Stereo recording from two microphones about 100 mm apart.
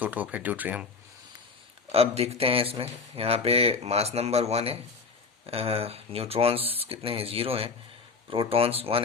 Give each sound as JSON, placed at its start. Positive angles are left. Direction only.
{"t": 0.0, "sound": "speech", "side_deg": -15}
{"t": 1.9, "sound": "speech", "side_deg": -90}